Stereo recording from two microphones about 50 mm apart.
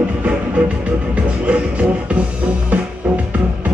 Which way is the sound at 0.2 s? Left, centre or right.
Right.